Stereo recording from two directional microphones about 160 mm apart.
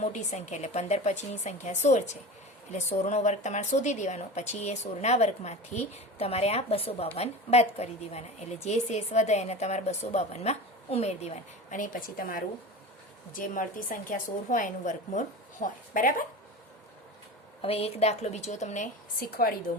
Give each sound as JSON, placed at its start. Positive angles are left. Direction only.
{"t": 0.0, "sound": "a woman's voice", "side_deg": 45}
{"t": 17.6, "sound": "a woman's voice", "side_deg": 40}